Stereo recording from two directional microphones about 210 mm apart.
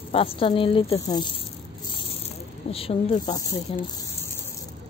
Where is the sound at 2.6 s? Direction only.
30° left (ahead or behind).